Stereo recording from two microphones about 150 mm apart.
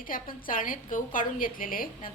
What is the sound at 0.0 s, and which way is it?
A woman's voice, 65° left (ahead or behind).